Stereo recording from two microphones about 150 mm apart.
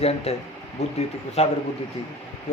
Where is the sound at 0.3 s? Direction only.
45° left (ahead or behind).